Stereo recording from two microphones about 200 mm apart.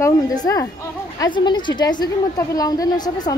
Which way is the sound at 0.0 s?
20° left (ahead or behind).